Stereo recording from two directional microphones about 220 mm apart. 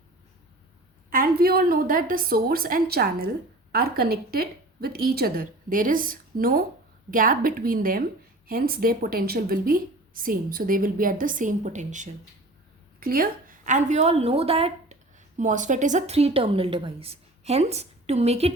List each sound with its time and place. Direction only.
1.1 s a woman's voice: 40° right (ahead or behind)